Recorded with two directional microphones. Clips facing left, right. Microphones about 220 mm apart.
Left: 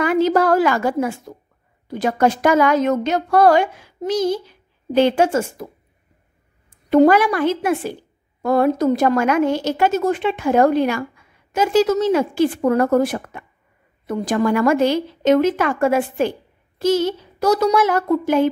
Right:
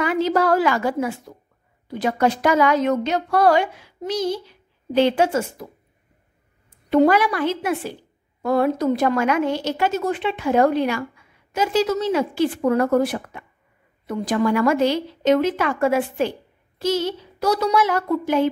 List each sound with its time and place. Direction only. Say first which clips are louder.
0.0 s a woman's voice: left 3 dB; 50° left (ahead or behind)
6.9 s a woman's voice: left 3 dB; 45° left (ahead or behind)